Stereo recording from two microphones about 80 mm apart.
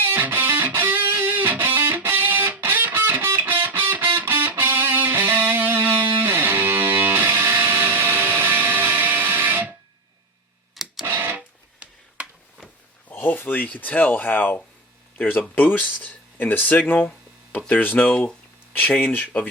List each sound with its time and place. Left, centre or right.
0.0 s music: right
11.0 s music: right
13.1 s speech: left